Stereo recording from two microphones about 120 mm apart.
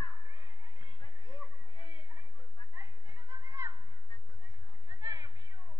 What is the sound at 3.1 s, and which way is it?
Chatter, 30° right (ahead or behind).